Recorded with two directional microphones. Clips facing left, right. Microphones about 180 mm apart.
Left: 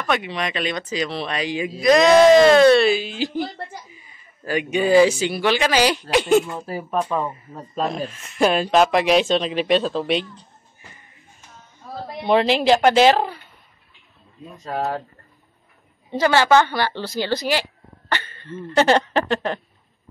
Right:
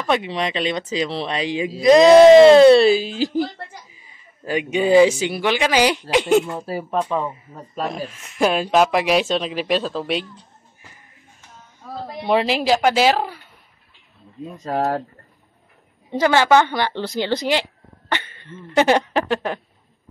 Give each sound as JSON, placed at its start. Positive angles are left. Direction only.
{"t": 0.0, "sound": "speech", "side_deg": -25}
{"t": 4.5, "sound": "speech", "side_deg": -20}
{"t": 12.3, "sound": "speech", "side_deg": -5}
{"t": 16.1, "sound": "a woman's voice", "side_deg": -15}